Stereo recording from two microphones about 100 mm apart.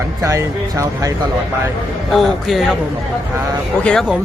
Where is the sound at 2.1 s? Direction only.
Centre (ahead or behind).